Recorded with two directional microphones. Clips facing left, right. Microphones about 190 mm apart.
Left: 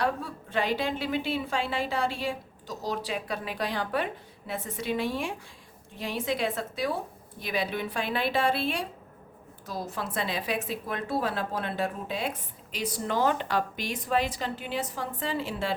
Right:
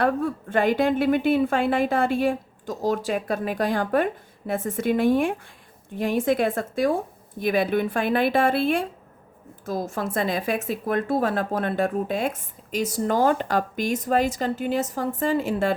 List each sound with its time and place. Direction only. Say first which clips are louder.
0.0 s a woman's voice: right 7 dB; 50° right (ahead or behind)